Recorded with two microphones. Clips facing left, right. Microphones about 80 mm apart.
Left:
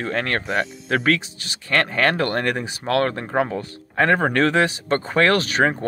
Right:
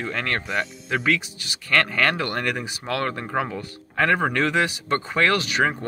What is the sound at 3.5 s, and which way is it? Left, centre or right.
Speech, left.